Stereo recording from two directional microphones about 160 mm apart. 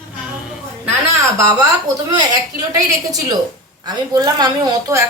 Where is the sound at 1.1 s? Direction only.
20° right (ahead or behind).